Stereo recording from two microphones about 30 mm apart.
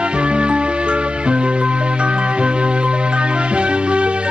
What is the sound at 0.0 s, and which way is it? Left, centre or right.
Music, right.